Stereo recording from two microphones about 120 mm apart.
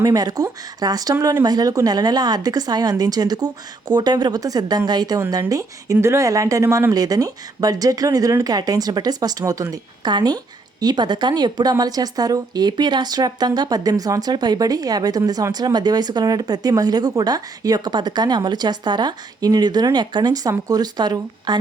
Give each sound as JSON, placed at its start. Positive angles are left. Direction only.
{"t": 0.0, "sound": "a woman's voice", "side_deg": -30}